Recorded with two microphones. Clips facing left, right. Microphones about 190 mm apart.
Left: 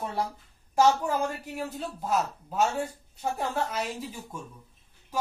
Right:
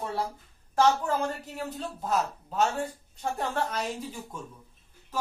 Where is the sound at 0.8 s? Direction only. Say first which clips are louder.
Left 1 dB; 10° left (ahead or behind).